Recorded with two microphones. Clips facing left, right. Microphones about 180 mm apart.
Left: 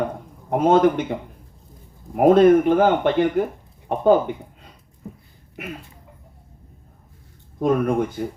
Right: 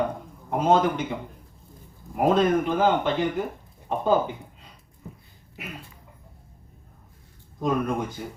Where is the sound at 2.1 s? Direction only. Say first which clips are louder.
Left 8 dB; 55° left (ahead or behind).